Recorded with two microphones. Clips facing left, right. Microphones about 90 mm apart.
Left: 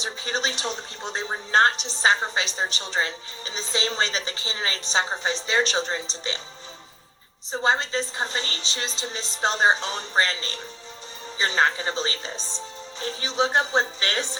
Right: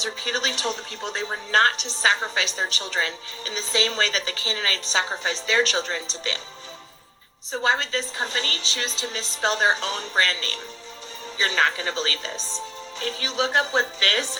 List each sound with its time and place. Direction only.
0.0 s a woman's voice: 30° left (ahead or behind)
7.6 s a woman's voice: 30° left (ahead or behind)